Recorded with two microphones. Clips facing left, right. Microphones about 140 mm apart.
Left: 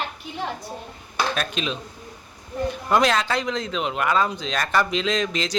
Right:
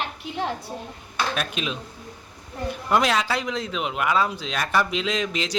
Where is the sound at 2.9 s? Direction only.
5° right (ahead or behind).